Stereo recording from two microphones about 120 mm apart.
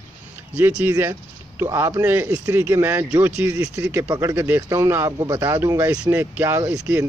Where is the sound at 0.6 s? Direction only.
15° right (ahead or behind).